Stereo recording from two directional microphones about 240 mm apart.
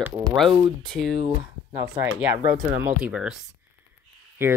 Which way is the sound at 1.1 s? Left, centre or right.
Centre.